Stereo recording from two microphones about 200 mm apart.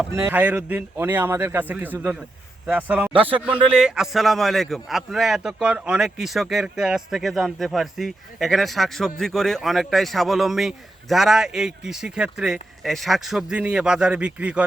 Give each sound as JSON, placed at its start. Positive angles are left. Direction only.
{"t": 0.1, "sound": "speech", "side_deg": -10}
{"t": 3.1, "sound": "speech", "side_deg": -25}
{"t": 3.4, "sound": "a man's voice", "side_deg": -5}